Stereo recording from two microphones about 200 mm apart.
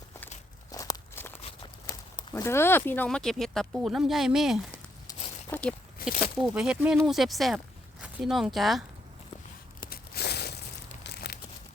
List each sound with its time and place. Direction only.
0.7 s walk: 15° left (ahead or behind)
1.4 s a sound: 30° left (ahead or behind)
2.3 s speech: 10° left (ahead or behind)
6.0 s speech: 50° left (ahead or behind)
6.4 s speech: 5° right (ahead or behind)
9.9 s a sound: 55° left (ahead or behind)
11.0 s crumpling: 55° left (ahead or behind)